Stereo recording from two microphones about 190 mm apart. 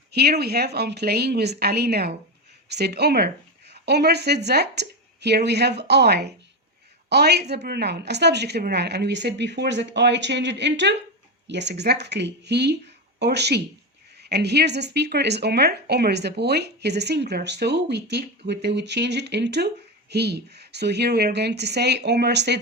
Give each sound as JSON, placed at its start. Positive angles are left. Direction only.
{"t": 0.1, "sound": "speech", "side_deg": -60}